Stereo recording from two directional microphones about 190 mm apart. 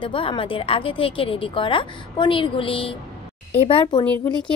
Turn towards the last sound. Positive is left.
turn(degrees=25)  # may be behind; listen again after turning